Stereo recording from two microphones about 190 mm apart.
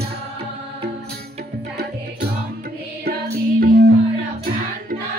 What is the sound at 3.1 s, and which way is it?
Music, 55° right (ahead or behind).